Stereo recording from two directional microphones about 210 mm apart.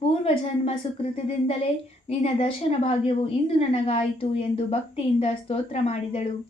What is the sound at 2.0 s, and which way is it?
Speech, 30° left (ahead or behind).